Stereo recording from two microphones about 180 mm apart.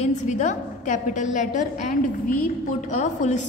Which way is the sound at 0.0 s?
40° left (ahead or behind).